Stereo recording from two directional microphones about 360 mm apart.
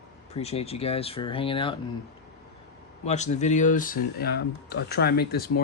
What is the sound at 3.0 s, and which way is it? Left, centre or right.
Speech, centre.